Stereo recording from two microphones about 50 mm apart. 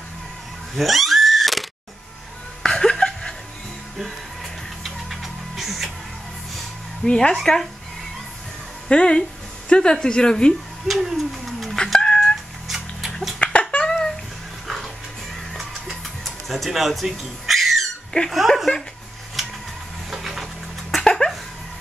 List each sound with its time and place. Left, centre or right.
0.7 s a sound: centre
2.6 s chuckle: centre
4.8 s music: centre
7.1 s a woman's voice: centre
8.8 s a woman's voice: centre
10.9 s speech: centre
11.7 s cat: centre
12.6 s a sound: centre
13.4 s a sound: left
16.3 s a sound: centre
18.1 s speech: left
19.4 s printer: centre
20.1 s music: centre
20.9 s dog: centre